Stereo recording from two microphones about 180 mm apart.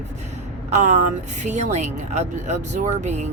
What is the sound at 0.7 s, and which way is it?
Speech, 40° right (ahead or behind).